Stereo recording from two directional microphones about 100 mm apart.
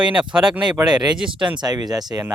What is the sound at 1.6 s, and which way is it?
Speech, 40° right (ahead or behind).